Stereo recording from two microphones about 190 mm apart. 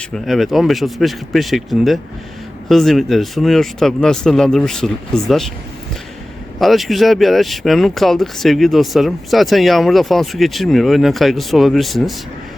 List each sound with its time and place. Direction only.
0.3 s speech: centre (ahead or behind)
6.6 s speech: centre (ahead or behind)